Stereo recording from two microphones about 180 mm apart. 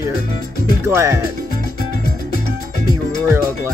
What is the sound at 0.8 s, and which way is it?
Speech, 15° right (ahead or behind).